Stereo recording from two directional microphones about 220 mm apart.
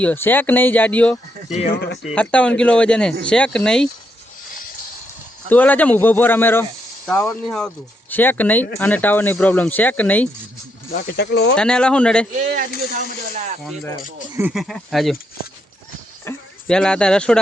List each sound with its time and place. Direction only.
0.0 s speech: 10° left (ahead or behind)
1.5 s speech: 30° left (ahead or behind)
1.7 s speech: 50° left (ahead or behind)
2.1 s a man's voice: 5° left (ahead or behind)
5.5 s speech: 5° left (ahead or behind)
10.9 s speech: 45° left (ahead or behind)
11.5 s a man's voice: 5° left (ahead or behind)
14.3 s a man's voice: 5° right (ahead or behind)
16.2 s speech: 5° left (ahead or behind)